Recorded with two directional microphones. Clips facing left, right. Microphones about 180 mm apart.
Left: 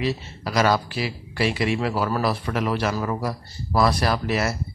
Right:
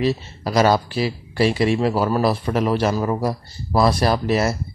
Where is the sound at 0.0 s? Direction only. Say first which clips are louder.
Right 5 dB; 30° right (ahead or behind).